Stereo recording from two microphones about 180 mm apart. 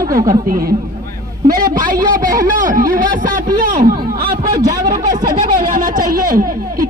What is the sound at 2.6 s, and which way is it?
Speech, 50° right (ahead or behind).